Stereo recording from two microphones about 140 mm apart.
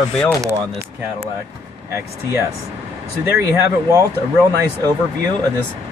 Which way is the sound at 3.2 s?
20° right (ahead or behind).